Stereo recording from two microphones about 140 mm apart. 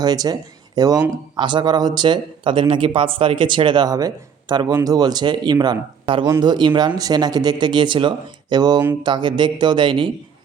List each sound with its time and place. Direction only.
0.0 s speech: 30° right (ahead or behind)